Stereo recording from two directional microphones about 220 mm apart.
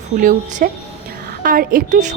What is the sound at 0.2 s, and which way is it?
A woman's voice, 40° right (ahead or behind).